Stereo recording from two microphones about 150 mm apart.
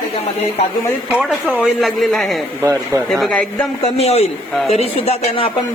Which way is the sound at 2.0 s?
Centre (ahead or behind).